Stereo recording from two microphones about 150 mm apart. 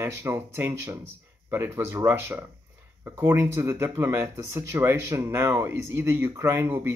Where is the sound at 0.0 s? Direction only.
15° right (ahead or behind).